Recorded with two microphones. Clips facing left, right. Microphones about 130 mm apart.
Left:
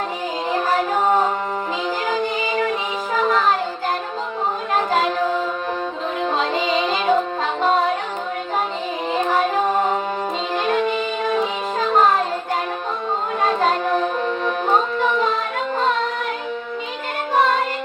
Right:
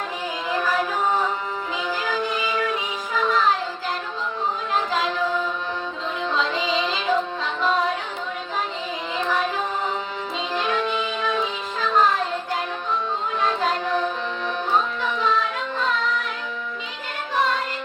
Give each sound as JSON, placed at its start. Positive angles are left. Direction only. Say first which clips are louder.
{"t": 0.5, "sound": "music", "louder": "left 4 dB", "side_deg": 50}
{"t": 4.7, "sound": "music", "louder": "left 6 dB", "side_deg": 55}
{"t": 9.1, "sound": "music", "louder": "left 5 dB", "side_deg": 50}
{"t": 13.4, "sound": "music", "louder": "left 5 dB", "side_deg": 50}
{"t": 17.3, "sound": "music", "louder": "left 5 dB", "side_deg": 50}